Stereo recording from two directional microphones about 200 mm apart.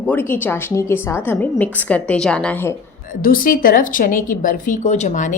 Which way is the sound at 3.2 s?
45° left (ahead or behind).